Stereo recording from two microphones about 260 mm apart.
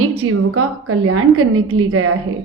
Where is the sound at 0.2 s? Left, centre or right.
Right.